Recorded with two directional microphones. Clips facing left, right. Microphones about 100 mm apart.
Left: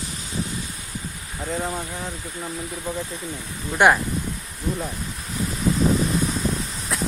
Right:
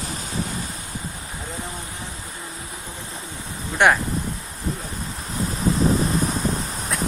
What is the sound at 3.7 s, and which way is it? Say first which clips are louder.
Speech: left 1 dB; 5° left (ahead or behind).